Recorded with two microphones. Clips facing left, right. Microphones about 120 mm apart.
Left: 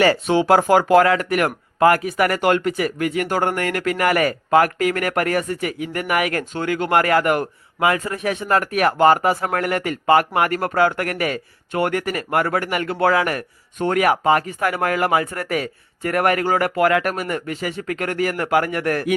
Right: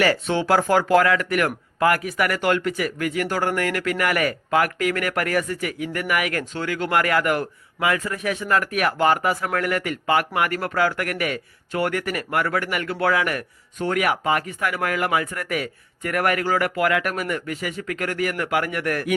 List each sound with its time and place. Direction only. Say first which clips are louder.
0.0 s speech: left 4 dB; 25° left (ahead or behind)